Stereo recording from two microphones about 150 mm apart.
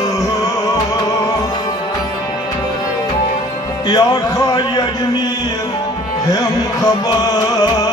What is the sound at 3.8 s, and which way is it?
Speech, 25° left (ahead or behind).